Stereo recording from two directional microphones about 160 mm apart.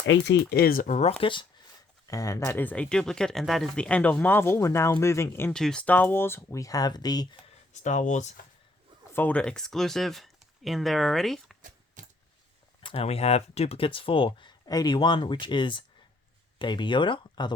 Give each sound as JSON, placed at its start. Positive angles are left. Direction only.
{"t": 0.5, "sound": "speech", "side_deg": 65}
{"t": 1.2, "sound": "speech", "side_deg": 30}
{"t": 2.0, "sound": "speech", "side_deg": 20}
{"t": 5.5, "sound": "speech", "side_deg": 5}
{"t": 7.7, "sound": "speech", "side_deg": 50}
{"t": 9.1, "sound": "speech", "side_deg": 10}
{"t": 12.0, "sound": "keys jangling", "side_deg": -50}
{"t": 12.8, "sound": "speech", "side_deg": 35}